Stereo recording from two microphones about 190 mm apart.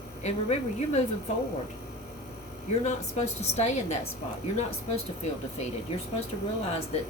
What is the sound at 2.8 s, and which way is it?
Speech, 35° left (ahead or behind).